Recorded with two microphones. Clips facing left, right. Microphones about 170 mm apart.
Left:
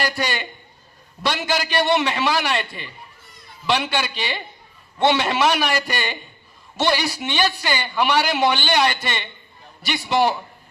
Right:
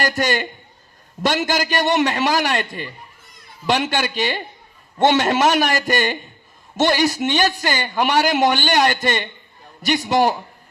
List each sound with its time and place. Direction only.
0.0 s a man's voice: 45° right (ahead or behind)